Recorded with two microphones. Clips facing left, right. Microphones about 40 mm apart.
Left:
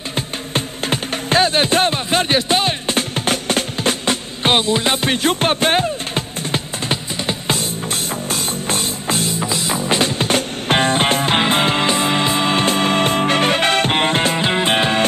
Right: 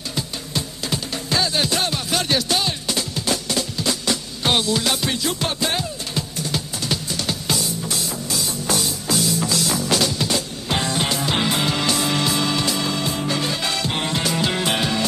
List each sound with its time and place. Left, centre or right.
0.1 s music: left
9.4 s music: left